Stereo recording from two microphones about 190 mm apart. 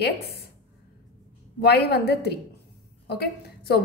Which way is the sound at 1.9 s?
60° left (ahead or behind).